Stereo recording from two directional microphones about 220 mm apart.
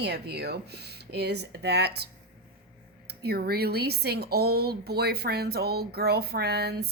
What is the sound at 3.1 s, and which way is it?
A woman's voice, 45° right (ahead or behind).